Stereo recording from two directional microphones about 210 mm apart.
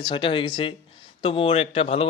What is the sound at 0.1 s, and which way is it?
Speech, 25° left (ahead or behind).